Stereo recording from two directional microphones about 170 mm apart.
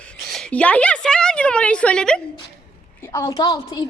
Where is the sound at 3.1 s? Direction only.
20° left (ahead or behind).